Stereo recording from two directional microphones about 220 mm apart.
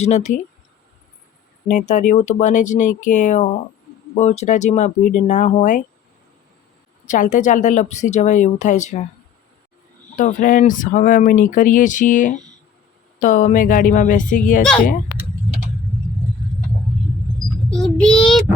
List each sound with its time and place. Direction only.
0.0 s speech: 30° left (ahead or behind)
1.6 s speech: 35° left (ahead or behind)
7.1 s speech: 35° left (ahead or behind)
10.2 s speech: 35° left (ahead or behind)
17.7 s child singing: 5° left (ahead or behind)